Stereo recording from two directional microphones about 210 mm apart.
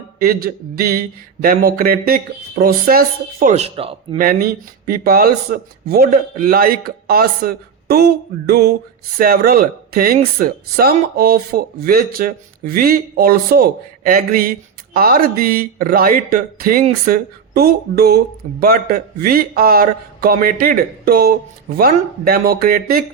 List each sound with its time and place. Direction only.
0.2 s speech: 45° right (ahead or behind)
3.4 s speech: 30° right (ahead or behind)
4.2 s speech: 45° right (ahead or behind)